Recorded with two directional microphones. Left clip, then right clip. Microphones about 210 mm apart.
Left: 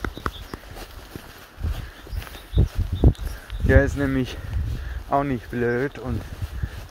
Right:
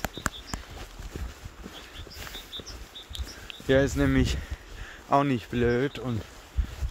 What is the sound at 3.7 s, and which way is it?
Speech, 25° right (ahead or behind).